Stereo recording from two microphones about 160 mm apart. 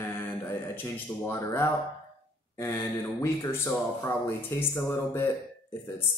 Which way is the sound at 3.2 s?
15° left (ahead or behind).